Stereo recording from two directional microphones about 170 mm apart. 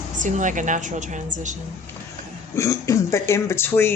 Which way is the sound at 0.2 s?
45° right (ahead or behind).